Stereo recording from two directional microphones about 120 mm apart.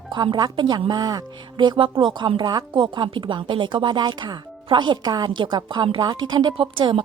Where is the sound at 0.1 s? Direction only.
35° right (ahead or behind).